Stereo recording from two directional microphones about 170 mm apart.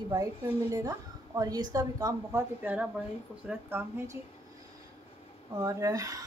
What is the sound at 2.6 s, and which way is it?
A woman's voice, 10° right (ahead or behind).